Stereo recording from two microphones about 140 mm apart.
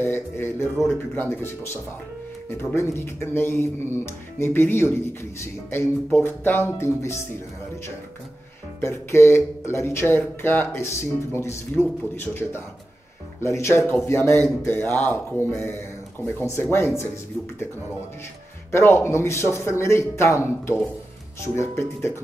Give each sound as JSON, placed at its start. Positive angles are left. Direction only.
{"t": 0.0, "sound": "speech", "side_deg": 15}
{"t": 8.8, "sound": "speech", "side_deg": 20}
{"t": 18.7, "sound": "speech", "side_deg": 20}